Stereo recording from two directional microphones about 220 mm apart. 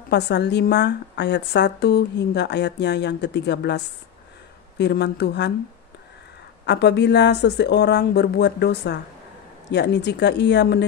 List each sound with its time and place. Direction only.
0.1 s a woman's voice: 50° left (ahead or behind)
6.6 s a woman's voice: 50° left (ahead or behind)